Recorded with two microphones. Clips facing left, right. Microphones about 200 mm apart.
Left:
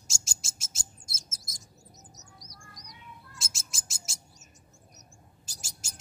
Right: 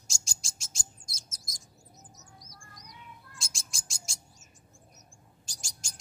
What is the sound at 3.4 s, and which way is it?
Bird, 5° left (ahead or behind).